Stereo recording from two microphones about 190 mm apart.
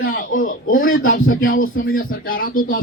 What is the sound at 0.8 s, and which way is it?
Speech, 90° left.